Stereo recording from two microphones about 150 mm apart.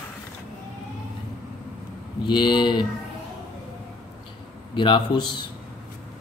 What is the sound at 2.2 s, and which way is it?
Speech, 30° left (ahead or behind).